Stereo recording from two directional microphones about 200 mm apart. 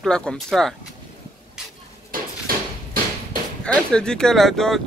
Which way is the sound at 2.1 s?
45° right (ahead or behind).